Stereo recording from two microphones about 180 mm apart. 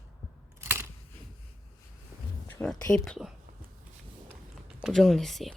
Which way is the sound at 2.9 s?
5° left (ahead or behind).